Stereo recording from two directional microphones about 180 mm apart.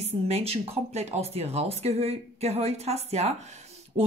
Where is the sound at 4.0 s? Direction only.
35° right (ahead or behind).